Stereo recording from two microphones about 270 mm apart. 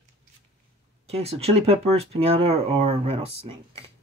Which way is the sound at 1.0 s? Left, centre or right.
Right.